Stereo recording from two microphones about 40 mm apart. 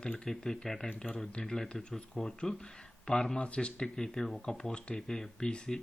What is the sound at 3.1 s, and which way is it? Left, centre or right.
Speech, left.